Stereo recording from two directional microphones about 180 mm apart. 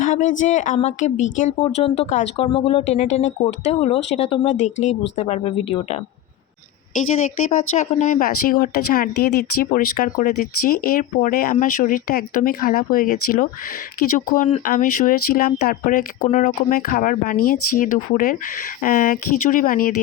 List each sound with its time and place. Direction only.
0.0 s speech: 45° left (ahead or behind)
7.8 s speech: 40° left (ahead or behind)